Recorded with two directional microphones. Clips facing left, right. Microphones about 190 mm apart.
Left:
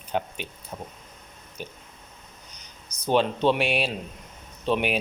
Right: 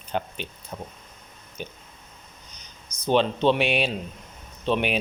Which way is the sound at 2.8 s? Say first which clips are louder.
Right 3 dB; 35° left (ahead or behind).